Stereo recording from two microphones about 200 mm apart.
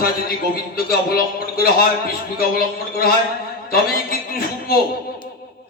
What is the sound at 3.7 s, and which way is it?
A man's voice, 50° left (ahead or behind).